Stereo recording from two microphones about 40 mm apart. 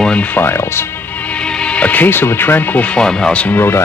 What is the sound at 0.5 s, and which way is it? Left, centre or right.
Speech, left.